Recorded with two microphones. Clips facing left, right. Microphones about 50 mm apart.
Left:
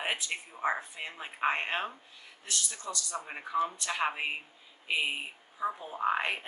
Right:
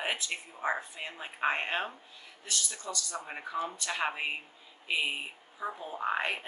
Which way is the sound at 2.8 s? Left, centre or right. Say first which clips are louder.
Left 1 dB; left.